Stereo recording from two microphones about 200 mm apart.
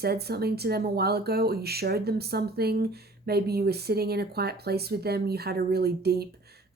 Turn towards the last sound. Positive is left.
turn(degrees=-50)  # may be behind; listen again after turning